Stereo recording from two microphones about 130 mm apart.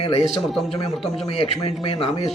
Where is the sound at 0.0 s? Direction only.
45° left (ahead or behind).